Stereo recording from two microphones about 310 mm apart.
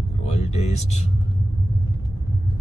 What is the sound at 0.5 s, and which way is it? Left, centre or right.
Speech, left.